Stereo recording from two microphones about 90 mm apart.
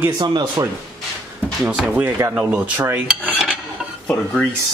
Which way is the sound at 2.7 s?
20° right (ahead or behind).